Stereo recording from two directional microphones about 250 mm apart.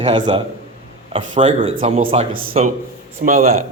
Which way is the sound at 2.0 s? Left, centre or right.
Right.